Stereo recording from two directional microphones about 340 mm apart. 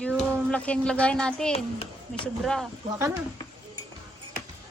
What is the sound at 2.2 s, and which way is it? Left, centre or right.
Speech, centre.